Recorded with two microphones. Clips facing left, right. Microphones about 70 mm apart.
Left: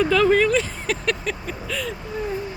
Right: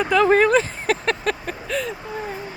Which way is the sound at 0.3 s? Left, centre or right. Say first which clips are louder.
Right 2 dB; right.